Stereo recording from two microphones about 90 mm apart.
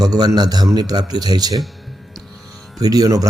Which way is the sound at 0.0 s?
45° right (ahead or behind).